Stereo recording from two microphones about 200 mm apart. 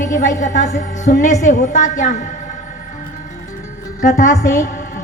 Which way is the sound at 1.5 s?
40° left (ahead or behind).